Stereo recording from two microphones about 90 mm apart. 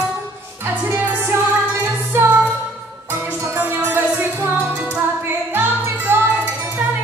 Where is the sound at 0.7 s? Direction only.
25° right (ahead or behind).